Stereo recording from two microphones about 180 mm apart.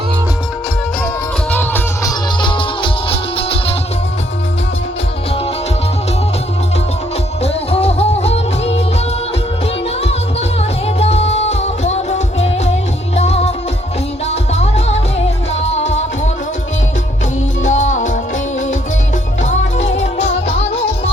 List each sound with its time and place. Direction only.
1.5 s music: 10° left (ahead or behind)
2.4 s music: 30° left (ahead or behind)
7.4 s music: 35° left (ahead or behind)
10.8 s music: 35° left (ahead or behind)
13.1 s music: 35° left (ahead or behind)
17.7 s music: 45° left (ahead or behind)
19.4 s music: 40° left (ahead or behind)